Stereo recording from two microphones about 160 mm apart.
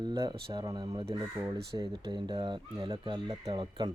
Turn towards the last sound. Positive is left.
turn(degrees=-30)  # may be behind; listen again after turning